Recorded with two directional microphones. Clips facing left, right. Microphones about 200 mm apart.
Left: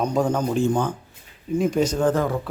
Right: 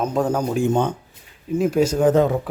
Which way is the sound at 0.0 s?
5° right (ahead or behind).